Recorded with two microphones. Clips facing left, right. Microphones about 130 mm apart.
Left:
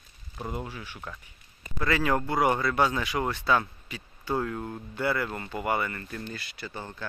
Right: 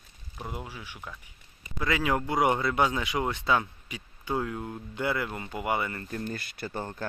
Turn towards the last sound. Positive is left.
turn(degrees=-45)  # may be behind; listen again after turning